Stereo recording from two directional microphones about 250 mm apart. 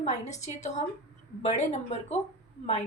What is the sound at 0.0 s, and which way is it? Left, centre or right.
A woman's voice, left.